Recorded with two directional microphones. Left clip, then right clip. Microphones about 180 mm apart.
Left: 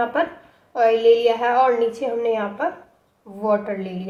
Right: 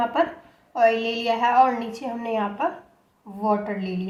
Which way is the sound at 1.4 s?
35° left (ahead or behind).